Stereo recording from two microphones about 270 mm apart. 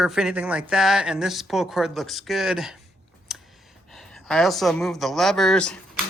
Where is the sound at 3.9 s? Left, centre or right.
Centre.